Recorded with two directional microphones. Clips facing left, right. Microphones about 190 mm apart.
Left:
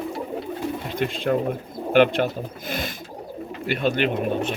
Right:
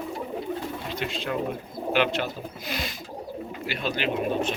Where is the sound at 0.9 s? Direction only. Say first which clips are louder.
Left 7 dB; 50° left (ahead or behind).